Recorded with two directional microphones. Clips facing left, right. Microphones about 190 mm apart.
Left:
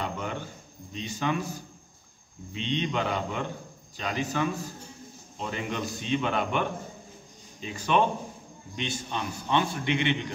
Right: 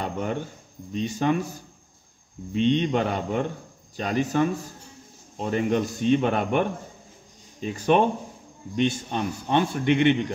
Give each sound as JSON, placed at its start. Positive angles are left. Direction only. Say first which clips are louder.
{"t": 0.0, "sound": "a sound", "louder": "right 5 dB", "side_deg": -45}
{"t": 0.9, "sound": "a man's voice", "louder": "right 6 dB", "side_deg": -45}
{"t": 2.5, "sound": "a man's voice", "louder": "right 8 dB", "side_deg": -45}
{"t": 7.6, "sound": "a man's voice", "louder": "right 5 dB", "side_deg": -50}